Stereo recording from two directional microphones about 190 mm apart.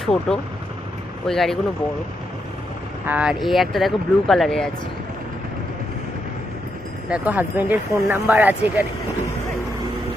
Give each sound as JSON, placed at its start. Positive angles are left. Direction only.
{"t": 0.0, "sound": "speech", "side_deg": 5}
{"t": 3.1, "sound": "speech", "side_deg": -5}
{"t": 7.1, "sound": "speech", "side_deg": -10}